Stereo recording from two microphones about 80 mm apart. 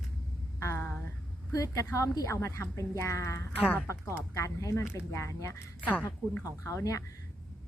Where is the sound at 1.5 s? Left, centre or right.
Left.